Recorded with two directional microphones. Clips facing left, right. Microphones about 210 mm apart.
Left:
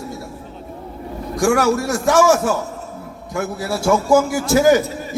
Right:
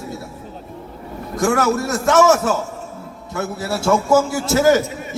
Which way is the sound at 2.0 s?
20° right (ahead or behind).